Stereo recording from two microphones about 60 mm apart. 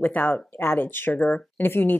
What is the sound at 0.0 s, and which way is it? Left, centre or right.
Speech, left.